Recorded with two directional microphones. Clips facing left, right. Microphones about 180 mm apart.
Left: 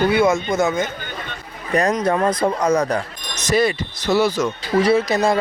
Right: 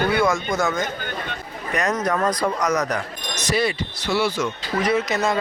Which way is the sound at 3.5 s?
45° left (ahead or behind).